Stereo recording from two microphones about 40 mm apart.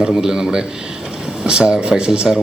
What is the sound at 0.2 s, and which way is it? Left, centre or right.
A man's voice, centre.